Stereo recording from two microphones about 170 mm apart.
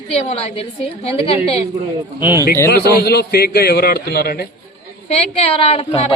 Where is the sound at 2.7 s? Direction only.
70° left (ahead or behind).